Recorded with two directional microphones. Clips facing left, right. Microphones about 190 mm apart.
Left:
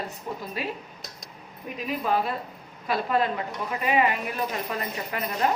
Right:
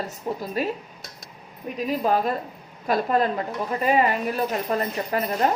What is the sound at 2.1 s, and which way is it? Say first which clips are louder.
A woman's voice: right 2 dB; 40° right (ahead or behind).